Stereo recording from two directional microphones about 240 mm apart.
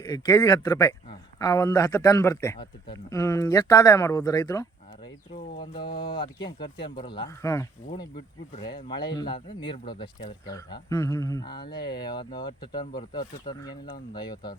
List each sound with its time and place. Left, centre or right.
0.1 s a man's voice: centre
5.3 s speech: left
5.7 s a man's voice: centre